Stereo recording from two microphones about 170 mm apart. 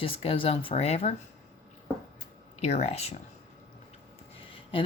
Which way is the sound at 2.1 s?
40° left (ahead or behind).